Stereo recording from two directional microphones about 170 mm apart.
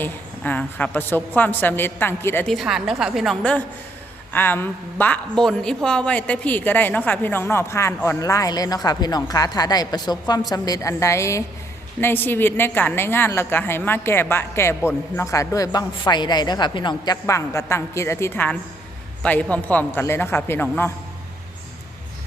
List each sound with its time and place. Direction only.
0.0 s a woman's voice: 10° left (ahead or behind)
2.5 s a woman's voice: centre (ahead or behind); by 20.9 s 15° left (ahead or behind)